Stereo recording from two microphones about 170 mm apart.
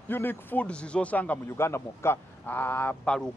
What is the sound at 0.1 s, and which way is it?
Speech, 10° left (ahead or behind).